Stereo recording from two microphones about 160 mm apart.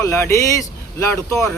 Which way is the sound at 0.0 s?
20° left (ahead or behind).